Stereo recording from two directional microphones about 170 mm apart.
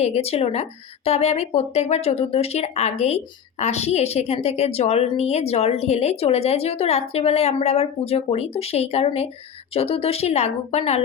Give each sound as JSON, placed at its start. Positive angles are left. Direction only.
{"t": 0.0, "sound": "a woman's voice", "side_deg": 40}